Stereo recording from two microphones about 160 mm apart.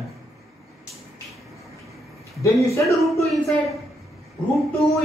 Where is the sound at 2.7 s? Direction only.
20° left (ahead or behind).